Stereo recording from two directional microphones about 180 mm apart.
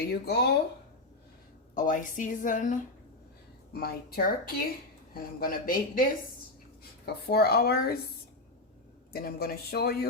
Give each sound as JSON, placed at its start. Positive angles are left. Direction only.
{"t": 0.1, "sound": "speech", "side_deg": 65}
{"t": 1.7, "sound": "a woman's voice", "side_deg": 45}
{"t": 3.7, "sound": "a woman's voice", "side_deg": 60}
{"t": 9.1, "sound": "speech", "side_deg": 55}